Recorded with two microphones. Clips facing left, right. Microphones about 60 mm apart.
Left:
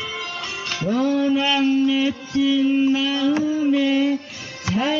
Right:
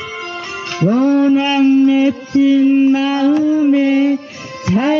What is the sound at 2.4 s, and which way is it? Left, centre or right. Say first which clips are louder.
Music: right 7 dB; right.